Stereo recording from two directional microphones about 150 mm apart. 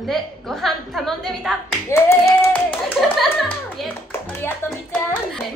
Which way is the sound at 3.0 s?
Centre (ahead or behind).